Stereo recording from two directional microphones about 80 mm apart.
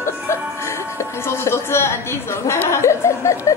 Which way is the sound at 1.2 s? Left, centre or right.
Left.